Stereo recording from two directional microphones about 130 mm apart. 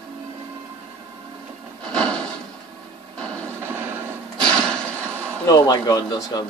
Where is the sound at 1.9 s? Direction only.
5° left (ahead or behind).